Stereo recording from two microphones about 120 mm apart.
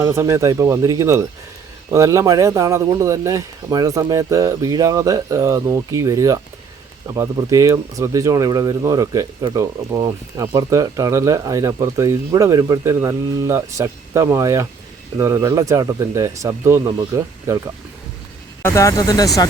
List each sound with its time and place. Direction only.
0.0 s speech: 25° right (ahead or behind)
18.6 s speech: 25° left (ahead or behind)